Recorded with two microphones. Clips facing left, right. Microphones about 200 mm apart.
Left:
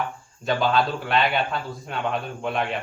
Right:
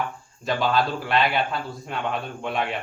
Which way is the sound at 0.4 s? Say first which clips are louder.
Left 1 dB; centre (ahead or behind).